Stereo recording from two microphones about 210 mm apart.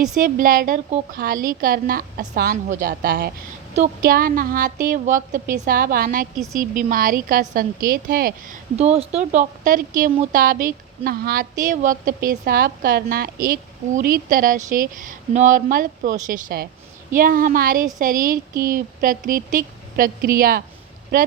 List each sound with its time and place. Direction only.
0.2 s a woman's voice: 40° right (ahead or behind)
0.9 s a woman's voice: 30° right (ahead or behind)
1.2 s a woman's voice: 40° right (ahead or behind)
8.7 s a woman's voice: 30° right (ahead or behind)